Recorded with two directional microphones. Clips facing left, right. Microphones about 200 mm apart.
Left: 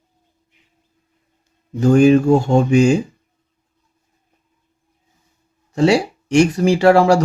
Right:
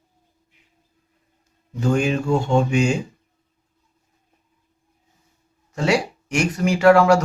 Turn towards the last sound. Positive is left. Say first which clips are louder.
# left 2 dB
turn(degrees=30)  # may be behind; listen again after turning